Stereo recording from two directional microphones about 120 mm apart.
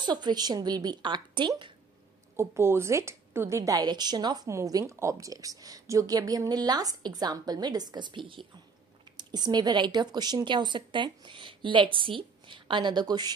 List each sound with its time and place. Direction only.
0.0 s a woman's voice: 40° right (ahead or behind)
2.3 s a woman's voice: 20° right (ahead or behind)